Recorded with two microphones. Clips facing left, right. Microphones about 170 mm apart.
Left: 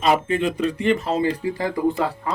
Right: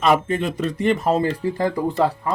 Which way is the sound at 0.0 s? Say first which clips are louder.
Right 1 dB; 50° right (ahead or behind).